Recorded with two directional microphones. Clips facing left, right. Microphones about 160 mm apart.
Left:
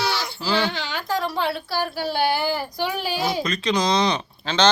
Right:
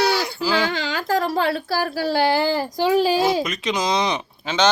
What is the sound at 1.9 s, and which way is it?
Speech, 90° right.